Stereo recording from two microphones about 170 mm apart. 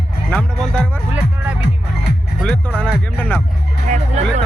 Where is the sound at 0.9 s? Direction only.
10° right (ahead or behind).